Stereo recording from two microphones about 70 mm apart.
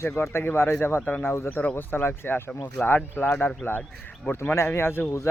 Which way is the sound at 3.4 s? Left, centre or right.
Left.